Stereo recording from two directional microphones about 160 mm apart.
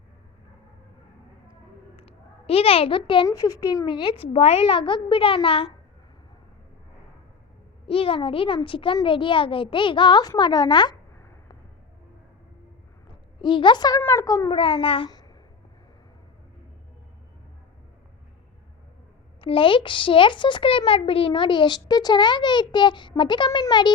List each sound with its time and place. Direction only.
2.0 s a sound: 35° left (ahead or behind)
3.2 s a child's voice: 25° left (ahead or behind)
7.9 s a child's voice: 35° left (ahead or behind)
13.1 s a sound: 30° left (ahead or behind)
14.0 s speech: 20° left (ahead or behind)
14.5 s a child's voice: 35° left (ahead or behind)
19.4 s speech: 30° left (ahead or behind)